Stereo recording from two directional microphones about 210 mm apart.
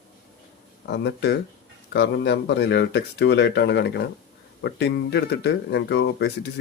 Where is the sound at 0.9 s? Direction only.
50° left (ahead or behind).